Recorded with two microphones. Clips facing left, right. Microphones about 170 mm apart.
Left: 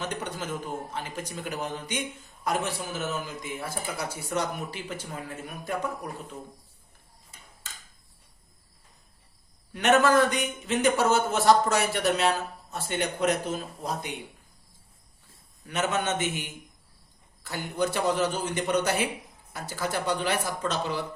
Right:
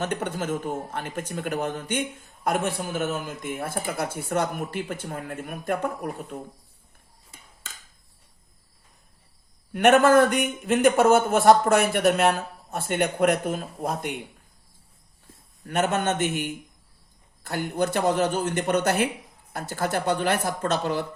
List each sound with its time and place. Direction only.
0.0 s a man's voice: 55° right (ahead or behind)
9.7 s a man's voice: 55° right (ahead or behind)
15.6 s a man's voice: 55° right (ahead or behind)